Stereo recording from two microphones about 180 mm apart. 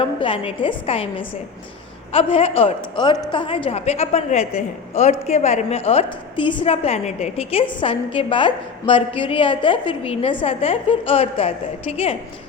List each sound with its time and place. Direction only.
0.0 s a woman's voice: 30° left (ahead or behind)